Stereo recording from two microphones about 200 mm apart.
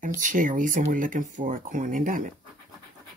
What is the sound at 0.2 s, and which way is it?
Speech, 40° right (ahead or behind).